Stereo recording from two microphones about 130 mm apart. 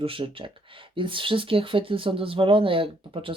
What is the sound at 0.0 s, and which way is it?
Speech, 45° right (ahead or behind).